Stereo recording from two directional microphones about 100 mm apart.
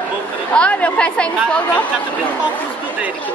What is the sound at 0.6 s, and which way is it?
Chatter, 10° left (ahead or behind).